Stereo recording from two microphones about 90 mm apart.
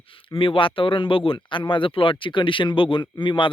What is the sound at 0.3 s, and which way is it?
Speech, 80° left.